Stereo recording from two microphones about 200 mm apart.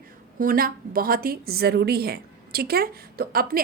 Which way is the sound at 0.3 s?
45° right (ahead or behind).